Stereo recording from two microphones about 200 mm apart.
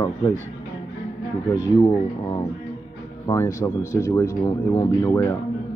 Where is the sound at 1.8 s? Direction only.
20° left (ahead or behind).